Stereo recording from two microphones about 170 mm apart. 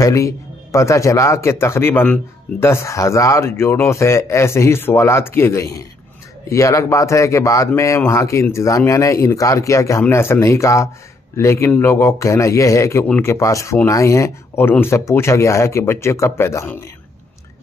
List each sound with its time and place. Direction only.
0.0 s speech: 20° left (ahead or behind)